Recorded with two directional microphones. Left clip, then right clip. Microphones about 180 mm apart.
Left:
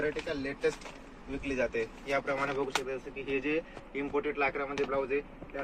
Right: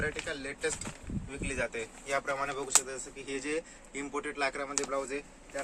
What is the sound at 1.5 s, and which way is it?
Speech, 5° right (ahead or behind).